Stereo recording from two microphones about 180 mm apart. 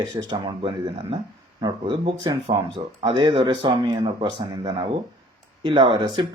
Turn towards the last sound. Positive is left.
turn(degrees=-25)  # may be behind; listen again after turning